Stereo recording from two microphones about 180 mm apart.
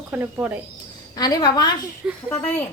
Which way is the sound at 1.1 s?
20° left (ahead or behind).